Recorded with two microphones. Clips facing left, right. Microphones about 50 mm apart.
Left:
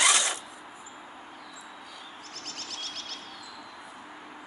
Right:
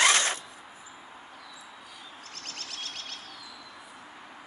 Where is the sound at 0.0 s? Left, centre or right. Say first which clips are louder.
Right 2 dB; right.